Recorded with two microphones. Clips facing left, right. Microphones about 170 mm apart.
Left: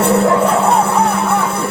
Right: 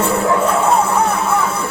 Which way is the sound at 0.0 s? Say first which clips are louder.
Left 3 dB; 75° left (ahead or behind).